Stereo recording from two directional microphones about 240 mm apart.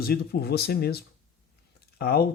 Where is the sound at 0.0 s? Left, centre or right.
Left.